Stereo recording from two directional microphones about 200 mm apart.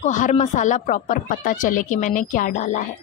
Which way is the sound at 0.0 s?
35° left (ahead or behind).